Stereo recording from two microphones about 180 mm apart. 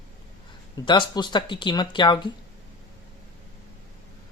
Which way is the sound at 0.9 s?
25° left (ahead or behind).